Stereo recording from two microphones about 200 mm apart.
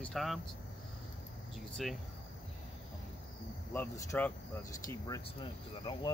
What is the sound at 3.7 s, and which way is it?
Speech, 10° left (ahead or behind).